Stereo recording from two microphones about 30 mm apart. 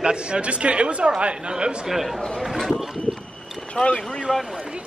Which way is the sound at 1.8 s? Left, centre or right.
Centre.